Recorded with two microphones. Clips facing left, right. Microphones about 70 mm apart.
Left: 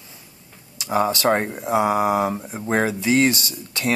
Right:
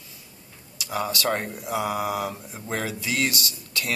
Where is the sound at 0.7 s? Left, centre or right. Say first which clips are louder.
Left 7 dB; left.